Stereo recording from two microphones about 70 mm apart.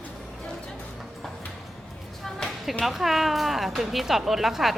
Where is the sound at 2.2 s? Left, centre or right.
Centre.